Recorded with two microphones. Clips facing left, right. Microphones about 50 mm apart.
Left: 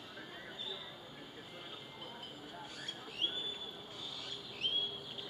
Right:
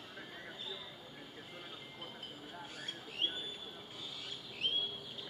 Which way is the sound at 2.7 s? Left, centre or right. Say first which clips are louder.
Right 2 dB; right.